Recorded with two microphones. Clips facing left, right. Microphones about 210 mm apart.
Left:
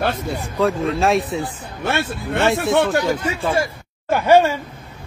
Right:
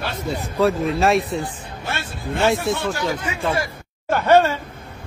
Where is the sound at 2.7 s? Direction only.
60° left (ahead or behind).